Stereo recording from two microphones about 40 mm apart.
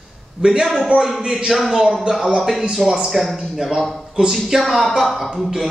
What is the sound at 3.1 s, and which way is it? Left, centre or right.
Speech, centre.